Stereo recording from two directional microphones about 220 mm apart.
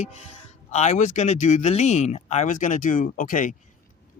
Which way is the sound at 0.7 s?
30° left (ahead or behind).